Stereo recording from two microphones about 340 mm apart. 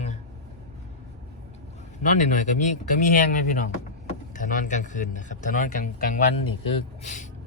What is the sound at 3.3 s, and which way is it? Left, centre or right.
A man's voice, left.